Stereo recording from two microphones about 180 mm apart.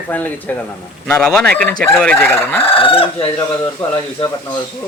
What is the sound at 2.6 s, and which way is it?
Speech, 30° left (ahead or behind).